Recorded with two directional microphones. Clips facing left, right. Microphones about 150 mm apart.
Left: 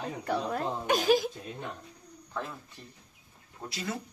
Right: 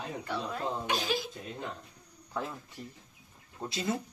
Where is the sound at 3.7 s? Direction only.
25° right (ahead or behind).